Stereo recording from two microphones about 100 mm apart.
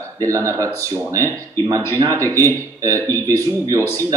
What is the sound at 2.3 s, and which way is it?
Speech, 35° right (ahead or behind).